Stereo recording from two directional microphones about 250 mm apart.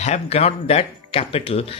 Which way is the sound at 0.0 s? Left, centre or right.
Left.